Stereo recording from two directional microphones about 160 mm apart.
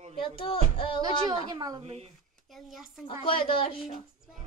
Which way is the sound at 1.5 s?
25° right (ahead or behind).